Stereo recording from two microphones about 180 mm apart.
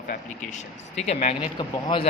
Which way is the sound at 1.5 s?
25° left (ahead or behind).